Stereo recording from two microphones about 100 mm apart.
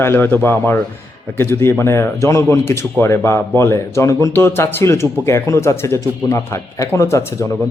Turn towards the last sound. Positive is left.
turn(degrees=30)  # may be behind; listen again after turning